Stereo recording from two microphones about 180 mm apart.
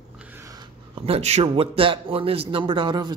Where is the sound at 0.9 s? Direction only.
35° right (ahead or behind).